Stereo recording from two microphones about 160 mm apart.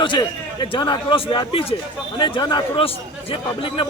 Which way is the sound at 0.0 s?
30° left (ahead or behind).